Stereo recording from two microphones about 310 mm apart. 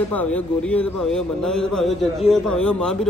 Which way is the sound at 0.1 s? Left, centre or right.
Centre.